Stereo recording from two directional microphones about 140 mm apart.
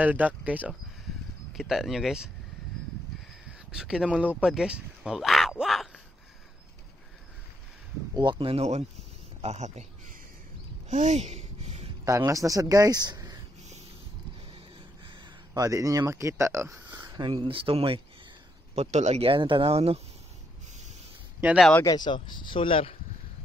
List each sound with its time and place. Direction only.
0.0 s speech: 10° right (ahead or behind)
3.7 s speech: 5° right (ahead or behind)
8.2 s a man's voice: 35° right (ahead or behind); by 10.1 s 55° right (ahead or behind)
10.9 s a sound: 60° right (ahead or behind)
12.0 s speech: 25° right (ahead or behind)
15.0 s speech: 30° right (ahead or behind)
17.3 s speech: 40° right (ahead or behind)
18.8 s speech: 55° right (ahead or behind)
21.8 s speech: 30° left (ahead or behind)